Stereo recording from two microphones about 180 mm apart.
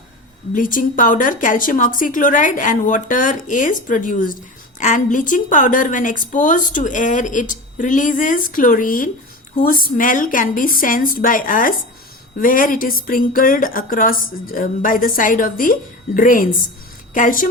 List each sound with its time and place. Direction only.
0.5 s a woman's voice: 50° left (ahead or behind)